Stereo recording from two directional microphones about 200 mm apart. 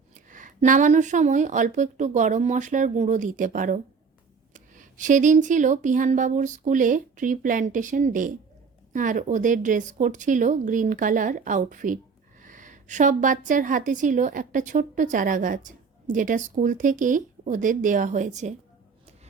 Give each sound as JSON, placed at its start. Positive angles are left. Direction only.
{"t": 0.3, "sound": "a woman's voice", "side_deg": -40}